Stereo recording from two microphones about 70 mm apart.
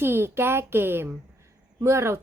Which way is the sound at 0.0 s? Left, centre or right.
Right.